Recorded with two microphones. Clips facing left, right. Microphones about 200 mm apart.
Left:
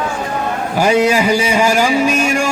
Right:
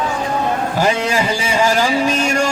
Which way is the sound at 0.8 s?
15° left (ahead or behind).